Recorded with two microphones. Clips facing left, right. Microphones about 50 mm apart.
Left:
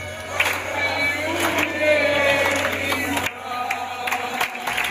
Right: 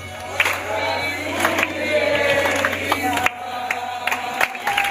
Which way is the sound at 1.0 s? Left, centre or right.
Left.